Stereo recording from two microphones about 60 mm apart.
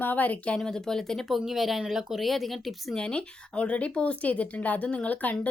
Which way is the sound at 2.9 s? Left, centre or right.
Centre.